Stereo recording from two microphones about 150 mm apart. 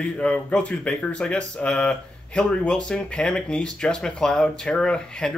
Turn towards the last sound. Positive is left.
turn(degrees=5)  # may be behind; listen again after turning